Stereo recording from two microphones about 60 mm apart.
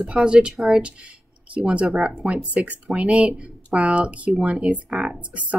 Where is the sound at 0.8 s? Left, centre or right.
Centre.